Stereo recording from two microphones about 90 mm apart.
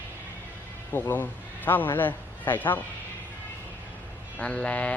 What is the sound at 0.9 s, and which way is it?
A man's voice, 20° left (ahead or behind).